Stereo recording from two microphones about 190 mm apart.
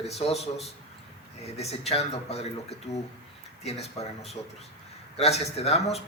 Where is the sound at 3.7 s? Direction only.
35° left (ahead or behind).